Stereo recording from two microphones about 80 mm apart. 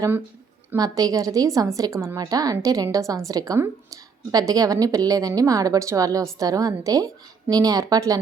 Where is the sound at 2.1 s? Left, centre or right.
Right.